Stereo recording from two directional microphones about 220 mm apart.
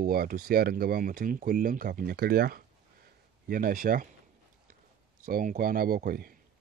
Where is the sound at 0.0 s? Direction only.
40° right (ahead or behind).